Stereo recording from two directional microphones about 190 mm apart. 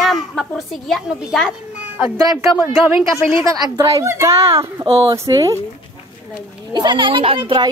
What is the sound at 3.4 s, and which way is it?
Speech, 20° right (ahead or behind).